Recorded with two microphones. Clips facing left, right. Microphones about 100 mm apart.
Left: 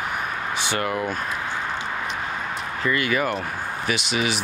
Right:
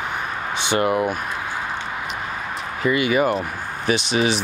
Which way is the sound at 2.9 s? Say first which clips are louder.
Right 5 dB; 15° right (ahead or behind).